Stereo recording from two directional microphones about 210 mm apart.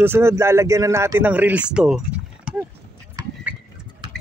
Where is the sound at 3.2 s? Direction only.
15° right (ahead or behind).